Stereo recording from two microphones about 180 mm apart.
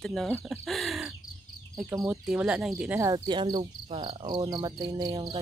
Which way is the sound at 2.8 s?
10° right (ahead or behind).